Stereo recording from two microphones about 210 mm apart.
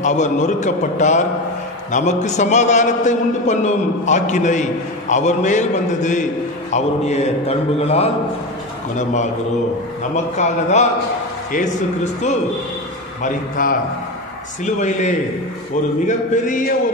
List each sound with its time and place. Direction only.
0.0 s a man's voice: 35° left (ahead or behind)
10.3 s a man's voice: 35° left (ahead or behind)